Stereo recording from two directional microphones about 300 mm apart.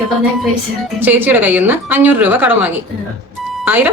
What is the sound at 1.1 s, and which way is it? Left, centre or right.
A woman's voice, centre.